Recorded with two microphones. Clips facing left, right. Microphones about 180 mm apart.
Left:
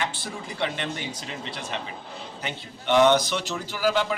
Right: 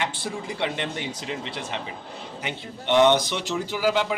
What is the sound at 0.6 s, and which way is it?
A man's voice, 20° right (ahead or behind).